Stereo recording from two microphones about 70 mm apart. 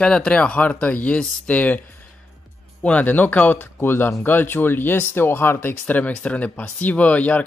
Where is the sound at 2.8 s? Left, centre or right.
Centre.